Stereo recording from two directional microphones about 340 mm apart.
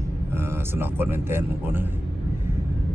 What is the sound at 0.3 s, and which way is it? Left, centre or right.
Speech, centre.